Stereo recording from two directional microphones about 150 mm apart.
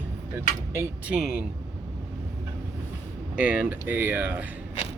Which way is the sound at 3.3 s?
10° right (ahead or behind).